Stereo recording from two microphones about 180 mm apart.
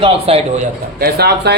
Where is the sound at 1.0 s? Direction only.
60° right (ahead or behind).